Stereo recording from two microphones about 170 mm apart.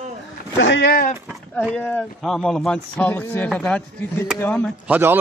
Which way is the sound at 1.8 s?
5° left (ahead or behind).